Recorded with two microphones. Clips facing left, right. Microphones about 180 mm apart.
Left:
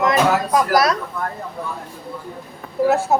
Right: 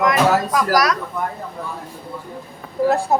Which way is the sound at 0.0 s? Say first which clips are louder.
Right 1 dB; 25° left (ahead or behind).